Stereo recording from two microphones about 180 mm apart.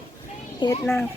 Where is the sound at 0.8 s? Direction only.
10° left (ahead or behind).